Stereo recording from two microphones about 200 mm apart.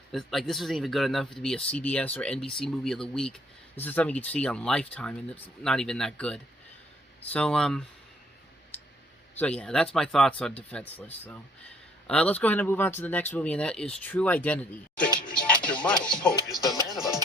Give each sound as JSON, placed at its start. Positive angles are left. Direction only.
{"t": 0.1, "sound": "speech", "side_deg": 0}
{"t": 9.4, "sound": "speech", "side_deg": 5}
{"t": 15.2, "sound": "music", "side_deg": 5}
{"t": 15.6, "sound": "speech", "side_deg": 5}
{"t": 16.6, "sound": "music", "side_deg": 20}